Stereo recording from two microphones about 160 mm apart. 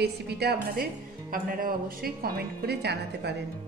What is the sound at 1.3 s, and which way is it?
Speech, 65° right (ahead or behind).